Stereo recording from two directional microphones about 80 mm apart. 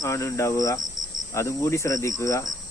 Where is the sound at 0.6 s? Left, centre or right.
Left.